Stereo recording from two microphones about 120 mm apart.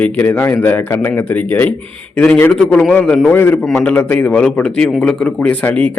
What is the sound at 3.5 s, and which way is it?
A man's voice, centre (ahead or behind).